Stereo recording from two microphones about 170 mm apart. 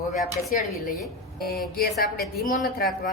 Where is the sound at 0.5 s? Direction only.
50° left (ahead or behind).